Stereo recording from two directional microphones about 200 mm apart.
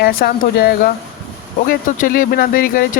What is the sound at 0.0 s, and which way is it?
Speech, 50° left (ahead or behind).